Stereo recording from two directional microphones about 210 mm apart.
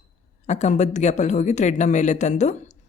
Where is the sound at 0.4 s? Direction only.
35° left (ahead or behind).